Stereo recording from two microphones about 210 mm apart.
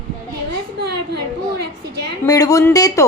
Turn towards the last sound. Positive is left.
turn(degrees=15)  # may be behind; listen again after turning